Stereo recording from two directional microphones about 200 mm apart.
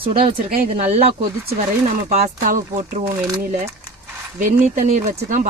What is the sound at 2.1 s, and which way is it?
Speech, 35° right (ahead or behind).